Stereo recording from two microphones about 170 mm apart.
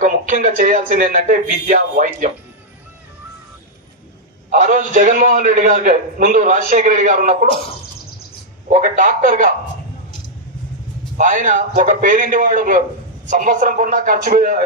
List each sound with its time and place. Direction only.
0.0 s a man's voice: 50° right (ahead or behind)
4.5 s a man's voice: 50° right (ahead or behind)
8.6 s a man's voice: 50° right (ahead or behind)
11.1 s a man's voice: 50° right (ahead or behind)